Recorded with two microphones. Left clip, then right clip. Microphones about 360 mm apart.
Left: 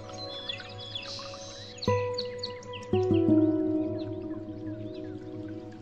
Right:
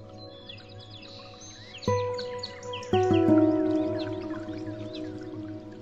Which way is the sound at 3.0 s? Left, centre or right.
Right.